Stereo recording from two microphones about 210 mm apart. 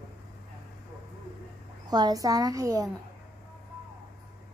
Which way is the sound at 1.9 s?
20° right (ahead or behind).